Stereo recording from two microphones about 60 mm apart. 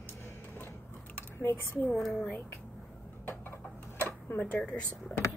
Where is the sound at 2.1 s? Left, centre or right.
Left.